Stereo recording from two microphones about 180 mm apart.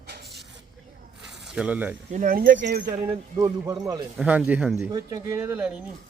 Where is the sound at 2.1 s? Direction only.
50° right (ahead or behind).